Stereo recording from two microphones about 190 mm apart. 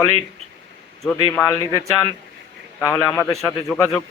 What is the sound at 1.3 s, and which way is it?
Speech, 15° left (ahead or behind).